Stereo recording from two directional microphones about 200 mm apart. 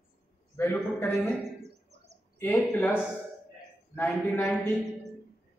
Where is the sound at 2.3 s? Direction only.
10° left (ahead or behind).